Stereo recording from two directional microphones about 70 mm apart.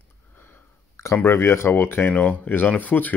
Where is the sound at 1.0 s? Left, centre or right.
Left.